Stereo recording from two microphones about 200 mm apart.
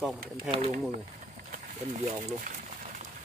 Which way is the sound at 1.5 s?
40° right (ahead or behind).